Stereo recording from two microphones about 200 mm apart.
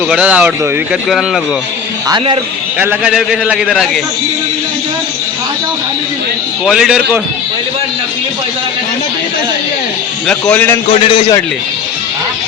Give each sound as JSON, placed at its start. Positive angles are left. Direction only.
{"t": 0.1, "sound": "a man's voice", "side_deg": -5}
{"t": 2.0, "sound": "speech", "side_deg": -25}
{"t": 2.7, "sound": "a man's voice", "side_deg": -5}
{"t": 6.7, "sound": "a man's voice", "side_deg": 0}
{"t": 10.5, "sound": "a man's voice", "side_deg": 10}
{"t": 10.9, "sound": "a man's voice", "side_deg": 25}